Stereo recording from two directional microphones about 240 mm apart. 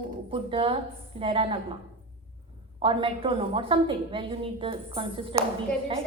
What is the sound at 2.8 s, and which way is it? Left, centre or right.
A woman's voice, right.